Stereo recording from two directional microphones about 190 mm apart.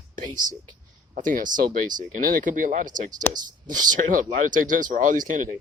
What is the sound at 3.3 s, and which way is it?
Speech, 20° right (ahead or behind).